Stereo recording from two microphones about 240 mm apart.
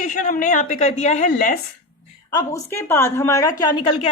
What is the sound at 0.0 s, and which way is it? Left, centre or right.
A woman's voice, left.